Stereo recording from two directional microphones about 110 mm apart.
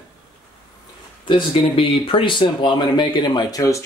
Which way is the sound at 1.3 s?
50° left (ahead or behind).